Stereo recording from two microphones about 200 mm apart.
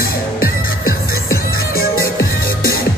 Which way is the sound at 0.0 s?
45° left (ahead or behind).